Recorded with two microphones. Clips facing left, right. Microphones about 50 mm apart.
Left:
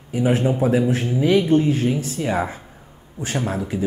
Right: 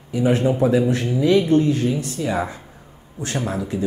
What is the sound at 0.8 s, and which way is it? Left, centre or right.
A man's voice, centre.